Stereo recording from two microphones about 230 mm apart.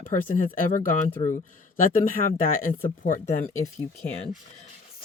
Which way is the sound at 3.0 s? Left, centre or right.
Left.